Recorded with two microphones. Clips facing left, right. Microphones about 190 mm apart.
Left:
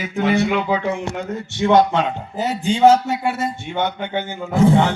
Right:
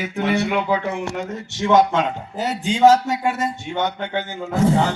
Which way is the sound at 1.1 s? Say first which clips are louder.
Left 2 dB; 45° right (ahead or behind).